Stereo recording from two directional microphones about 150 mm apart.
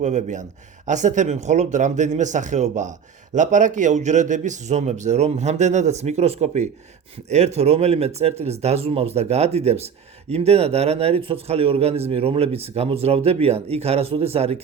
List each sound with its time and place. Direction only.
0.0 s speech: 55° right (ahead or behind)